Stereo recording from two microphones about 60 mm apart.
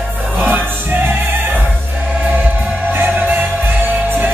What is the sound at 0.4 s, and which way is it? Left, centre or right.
Music, right.